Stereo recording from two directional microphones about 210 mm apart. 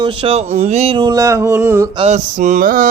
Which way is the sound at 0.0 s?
25° right (ahead or behind).